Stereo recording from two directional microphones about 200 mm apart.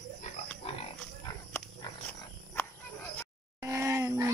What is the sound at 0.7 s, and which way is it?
Pig, 30° left (ahead or behind).